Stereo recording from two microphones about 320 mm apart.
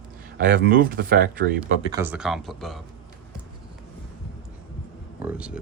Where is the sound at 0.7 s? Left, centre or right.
Right.